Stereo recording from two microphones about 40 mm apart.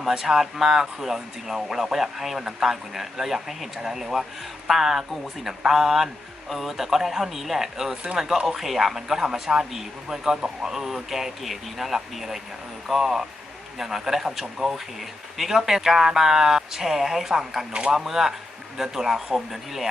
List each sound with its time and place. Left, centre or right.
0.0 s a man's voice: centre
8.0 s speech: right
8.4 s a man's voice: centre
17.7 s speech: right
17.9 s speech: centre